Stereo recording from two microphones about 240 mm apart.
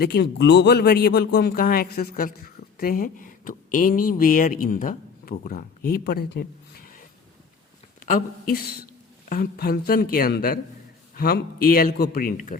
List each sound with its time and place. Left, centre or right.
0.0 s speech: left
8.0 s speech: left